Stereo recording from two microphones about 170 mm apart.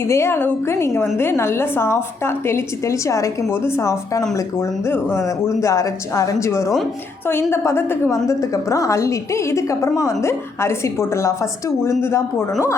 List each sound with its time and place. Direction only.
0.0 s a woman's voice: 15° left (ahead or behind)